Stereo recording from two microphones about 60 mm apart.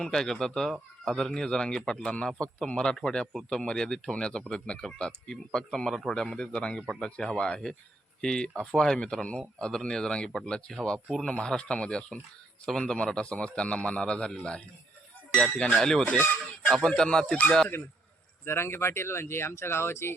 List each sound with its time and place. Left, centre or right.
0.0 s a man's voice: centre
18.4 s speech: left